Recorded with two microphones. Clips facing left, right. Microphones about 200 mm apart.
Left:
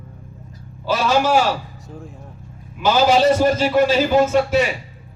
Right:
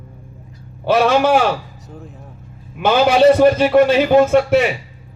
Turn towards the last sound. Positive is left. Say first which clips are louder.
# right 4 dB
turn(degrees=-60)  # may be behind; listen again after turning